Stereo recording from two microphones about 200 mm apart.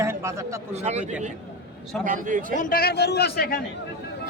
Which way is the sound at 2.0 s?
40° right (ahead or behind).